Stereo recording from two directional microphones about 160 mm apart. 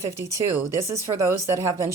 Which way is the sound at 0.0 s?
15° right (ahead or behind).